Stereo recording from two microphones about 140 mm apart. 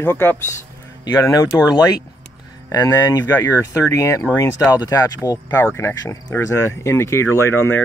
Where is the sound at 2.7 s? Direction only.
25° left (ahead or behind).